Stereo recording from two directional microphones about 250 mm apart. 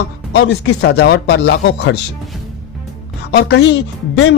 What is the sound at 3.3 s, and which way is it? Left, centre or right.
Speech, left.